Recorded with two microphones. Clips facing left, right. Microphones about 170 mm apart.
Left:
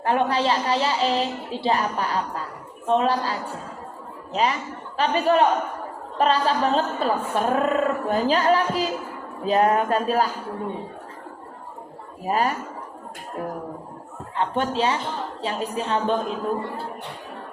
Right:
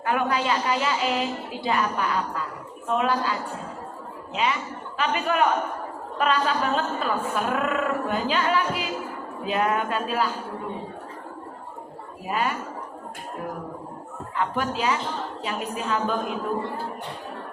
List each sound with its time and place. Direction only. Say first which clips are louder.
0.0 s a woman's voice: left 3 dB; 30° left (ahead or behind)
4.4 s a woman's voice: left 3 dB; 40° left (ahead or behind)
12.2 s a woman's voice: left 4 dB; 40° left (ahead or behind)
14.3 s a woman's voice: left 3 dB; 30° left (ahead or behind)